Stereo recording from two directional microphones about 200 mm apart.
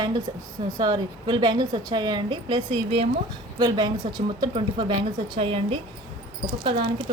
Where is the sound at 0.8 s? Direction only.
20° right (ahead or behind).